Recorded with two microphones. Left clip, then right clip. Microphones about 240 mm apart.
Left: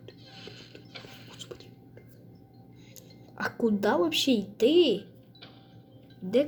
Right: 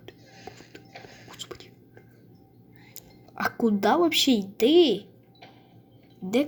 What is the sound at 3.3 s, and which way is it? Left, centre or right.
A woman's voice, centre.